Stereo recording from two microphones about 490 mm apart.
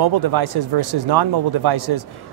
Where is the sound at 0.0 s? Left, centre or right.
Right.